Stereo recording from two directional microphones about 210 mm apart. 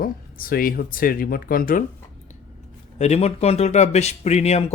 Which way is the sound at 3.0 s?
30° left (ahead or behind).